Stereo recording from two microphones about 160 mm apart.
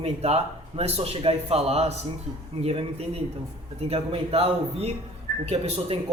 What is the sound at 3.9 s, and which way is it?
A man's voice, 40° right (ahead or behind).